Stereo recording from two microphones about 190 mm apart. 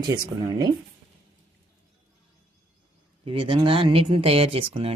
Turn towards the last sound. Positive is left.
turn(degrees=-30)  # may be behind; listen again after turning